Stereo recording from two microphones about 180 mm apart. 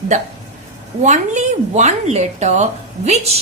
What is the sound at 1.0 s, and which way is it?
Speech, 40° right (ahead or behind).